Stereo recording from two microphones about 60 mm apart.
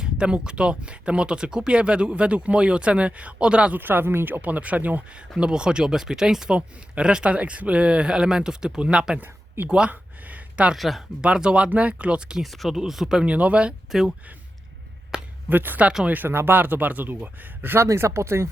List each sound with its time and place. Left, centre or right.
0.0 s speech: centre
3.8 s speech: right
4.4 s speech: right
5.4 s speech: centre
9.1 s speech: right
9.6 s speech: centre
9.9 s a sound: right
10.8 s speech: centre
11.2 s speech: centre
12.4 s speech: centre
13.2 s speech: right
15.1 s a sound: centre
15.4 s speech: right
17.8 s speech: right